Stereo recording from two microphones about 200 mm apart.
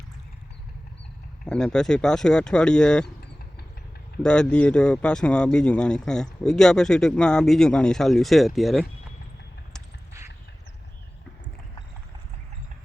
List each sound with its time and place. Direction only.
1.5 s speech: 5° left (ahead or behind)
4.2 s speech: 5° left (ahead or behind)